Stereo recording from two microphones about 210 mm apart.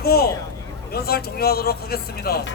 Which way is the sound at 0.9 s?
50° left (ahead or behind).